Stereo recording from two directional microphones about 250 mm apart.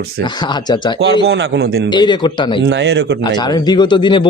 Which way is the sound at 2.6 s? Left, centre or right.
Right.